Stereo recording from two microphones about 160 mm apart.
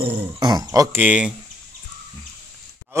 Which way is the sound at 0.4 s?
25° right (ahead or behind).